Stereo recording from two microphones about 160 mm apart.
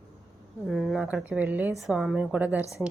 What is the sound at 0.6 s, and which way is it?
A woman's voice, centre (ahead or behind).